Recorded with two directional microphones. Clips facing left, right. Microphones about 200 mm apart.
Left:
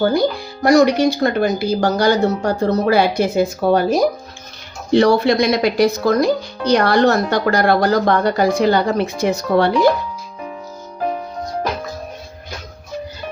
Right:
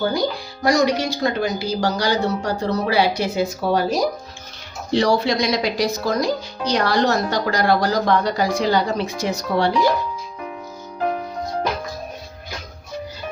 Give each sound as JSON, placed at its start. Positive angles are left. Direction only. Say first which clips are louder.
{"t": 0.6, "sound": "speech", "louder": "left 6 dB", "side_deg": 55}